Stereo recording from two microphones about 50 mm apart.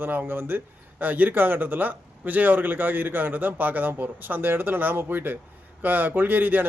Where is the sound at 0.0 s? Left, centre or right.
Right.